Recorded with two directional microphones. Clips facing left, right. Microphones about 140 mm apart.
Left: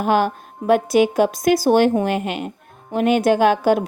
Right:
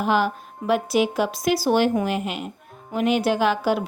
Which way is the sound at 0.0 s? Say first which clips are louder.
Left 3 dB; 50° left (ahead or behind).